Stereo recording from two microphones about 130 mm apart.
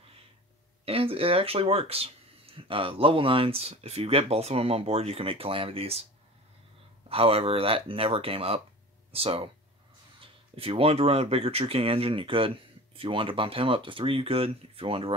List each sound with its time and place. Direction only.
0.8 s speech: 45° right (ahead or behind)
7.1 s speech: 50° right (ahead or behind)